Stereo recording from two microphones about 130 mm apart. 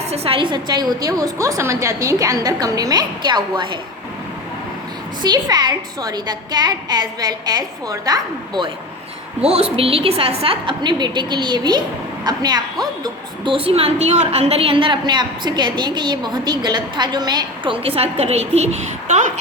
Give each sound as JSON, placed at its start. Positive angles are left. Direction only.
{"t": 0.1, "sound": "a woman's voice", "side_deg": -50}
{"t": 5.2, "sound": "a woman's voice", "side_deg": -30}
{"t": 9.4, "sound": "a woman's voice", "side_deg": -50}
{"t": 13.4, "sound": "a woman's voice", "side_deg": -45}